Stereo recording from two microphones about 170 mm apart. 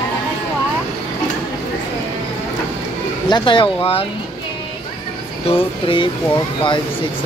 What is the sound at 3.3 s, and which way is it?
Speech, 30° left (ahead or behind).